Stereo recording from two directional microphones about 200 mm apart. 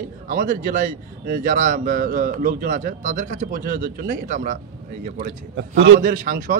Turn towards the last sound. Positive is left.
turn(degrees=-40)  # may be behind; listen again after turning